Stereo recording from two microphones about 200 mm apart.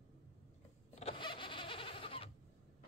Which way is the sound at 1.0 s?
25° left (ahead or behind).